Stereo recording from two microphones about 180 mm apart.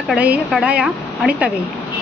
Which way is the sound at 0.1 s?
5° right (ahead or behind).